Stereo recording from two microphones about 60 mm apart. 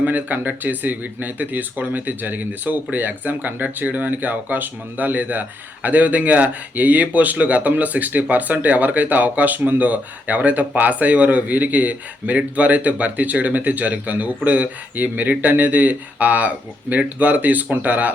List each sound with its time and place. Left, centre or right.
0.0 s speech: right